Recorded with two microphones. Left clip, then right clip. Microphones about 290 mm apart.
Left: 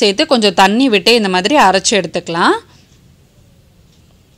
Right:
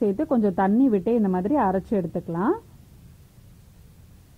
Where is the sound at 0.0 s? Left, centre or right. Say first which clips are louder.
Left 12 dB; centre.